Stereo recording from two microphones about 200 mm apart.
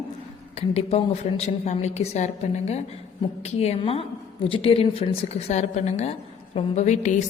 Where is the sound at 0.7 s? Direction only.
30° left (ahead or behind).